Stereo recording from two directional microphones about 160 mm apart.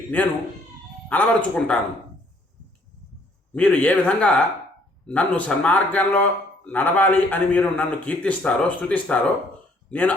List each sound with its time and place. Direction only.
1.1 s a man's voice: 10° left (ahead or behind)
3.5 s a man's voice: 10° left (ahead or behind)